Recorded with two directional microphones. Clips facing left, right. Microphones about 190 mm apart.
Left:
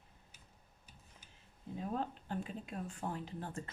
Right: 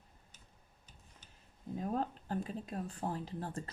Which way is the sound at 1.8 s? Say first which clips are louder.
Right 3 dB; 40° right (ahead or behind).